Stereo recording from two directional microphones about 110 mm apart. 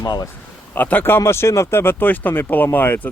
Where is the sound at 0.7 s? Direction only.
15° left (ahead or behind).